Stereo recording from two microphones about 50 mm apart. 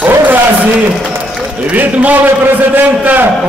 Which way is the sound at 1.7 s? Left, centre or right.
Right.